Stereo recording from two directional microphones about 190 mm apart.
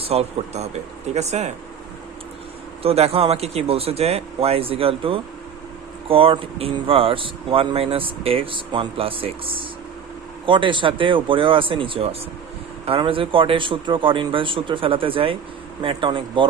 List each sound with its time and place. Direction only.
0.0 s speech: 30° right (ahead or behind)
2.8 s speech: 30° right (ahead or behind)